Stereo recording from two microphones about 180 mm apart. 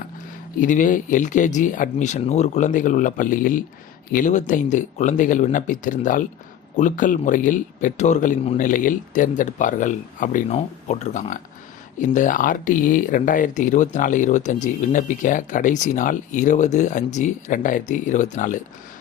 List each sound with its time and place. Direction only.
0.6 s speech: 45° left (ahead or behind)